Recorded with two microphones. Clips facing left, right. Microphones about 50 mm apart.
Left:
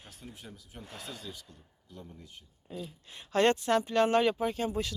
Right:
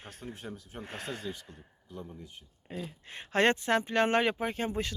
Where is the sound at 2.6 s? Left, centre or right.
Right.